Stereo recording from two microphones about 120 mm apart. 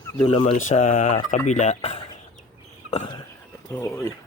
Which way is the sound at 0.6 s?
90° left.